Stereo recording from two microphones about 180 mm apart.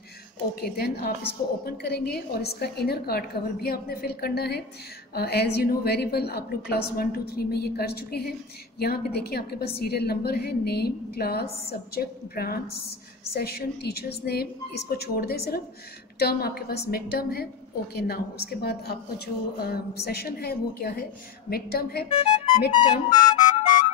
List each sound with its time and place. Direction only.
0.6 s a woman's voice: 60° left (ahead or behind)
23.0 s music: 45° left (ahead or behind)